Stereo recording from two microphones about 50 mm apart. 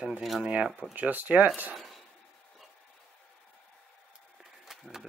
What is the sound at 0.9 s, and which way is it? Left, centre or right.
Speech, right.